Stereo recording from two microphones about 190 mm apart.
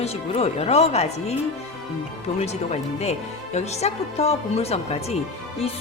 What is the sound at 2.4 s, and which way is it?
Speech, 35° left (ahead or behind).